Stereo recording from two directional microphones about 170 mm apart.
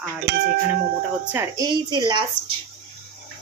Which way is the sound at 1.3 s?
15° right (ahead or behind).